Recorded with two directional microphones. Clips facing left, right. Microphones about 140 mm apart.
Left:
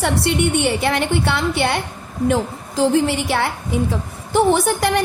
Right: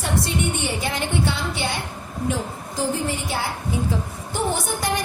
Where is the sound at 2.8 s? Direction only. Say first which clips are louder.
Left 8 dB; 80° left.